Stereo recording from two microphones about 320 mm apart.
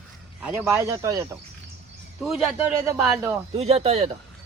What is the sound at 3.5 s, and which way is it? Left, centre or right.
Speech, centre.